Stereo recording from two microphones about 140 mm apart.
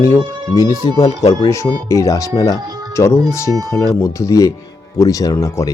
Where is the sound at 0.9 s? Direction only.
40° left (ahead or behind).